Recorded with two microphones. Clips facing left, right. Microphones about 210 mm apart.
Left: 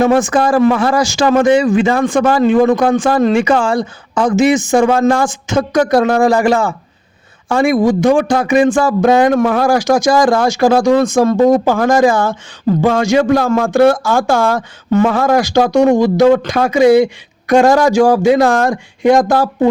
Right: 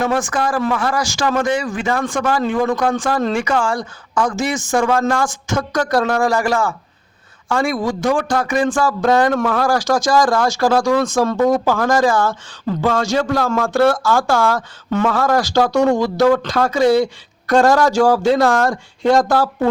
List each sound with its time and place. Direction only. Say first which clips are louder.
0.0 s a man's voice: left 7 dB; 25° left (ahead or behind)